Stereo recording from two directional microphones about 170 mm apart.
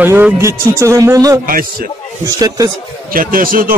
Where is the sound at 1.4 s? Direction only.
55° right (ahead or behind).